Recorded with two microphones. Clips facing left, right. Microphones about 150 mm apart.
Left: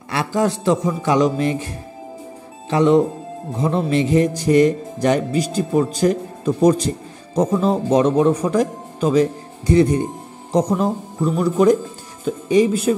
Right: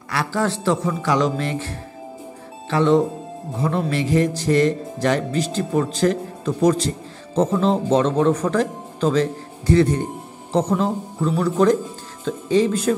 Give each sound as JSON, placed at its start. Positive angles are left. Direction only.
{"t": 0.1, "sound": "speech", "side_deg": 20}
{"t": 2.7, "sound": "speech", "side_deg": 15}